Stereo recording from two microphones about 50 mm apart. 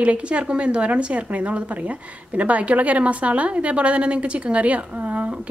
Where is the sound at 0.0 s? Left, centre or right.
Right.